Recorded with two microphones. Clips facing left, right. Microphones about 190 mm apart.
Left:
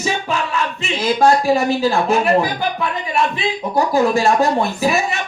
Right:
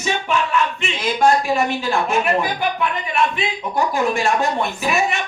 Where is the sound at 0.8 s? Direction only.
35° left (ahead or behind).